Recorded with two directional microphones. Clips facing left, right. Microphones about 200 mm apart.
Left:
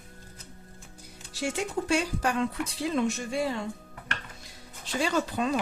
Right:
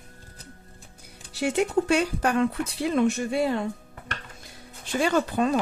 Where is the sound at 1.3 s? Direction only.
60° right (ahead or behind).